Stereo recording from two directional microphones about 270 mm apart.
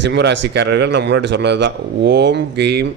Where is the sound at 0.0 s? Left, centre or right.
Right.